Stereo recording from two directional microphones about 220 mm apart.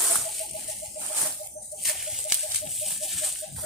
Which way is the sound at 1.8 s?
Centre (ahead or behind).